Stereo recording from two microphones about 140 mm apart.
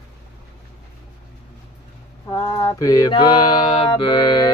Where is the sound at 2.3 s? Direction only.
25° left (ahead or behind).